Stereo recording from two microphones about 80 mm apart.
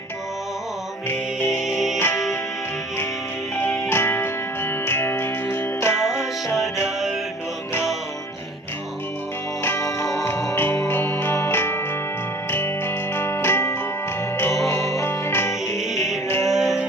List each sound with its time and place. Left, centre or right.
1.6 s music: centre
2.0 s music: left
3.6 s music: left
6.0 s music: centre
10.5 s music: left
14.7 s music: left
16.5 s music: centre